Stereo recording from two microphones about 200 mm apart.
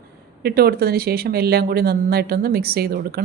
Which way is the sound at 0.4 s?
50° right (ahead or behind).